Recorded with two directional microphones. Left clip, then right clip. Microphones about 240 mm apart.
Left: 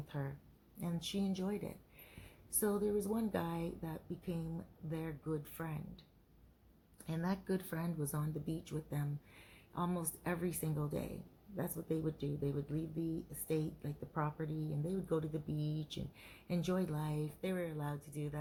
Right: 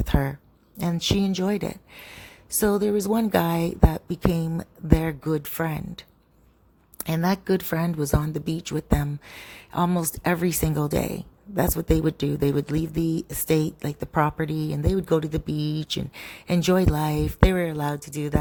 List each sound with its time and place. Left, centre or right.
0.1 s speech: right